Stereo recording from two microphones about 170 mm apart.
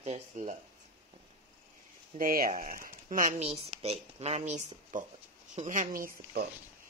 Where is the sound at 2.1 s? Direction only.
55° right (ahead or behind).